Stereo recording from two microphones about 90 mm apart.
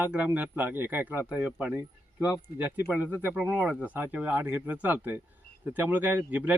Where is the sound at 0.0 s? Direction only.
20° right (ahead or behind).